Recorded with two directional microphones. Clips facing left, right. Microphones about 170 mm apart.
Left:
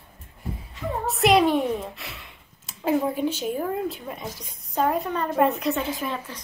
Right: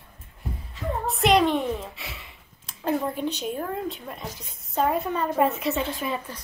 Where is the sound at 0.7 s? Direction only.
Centre (ahead or behind).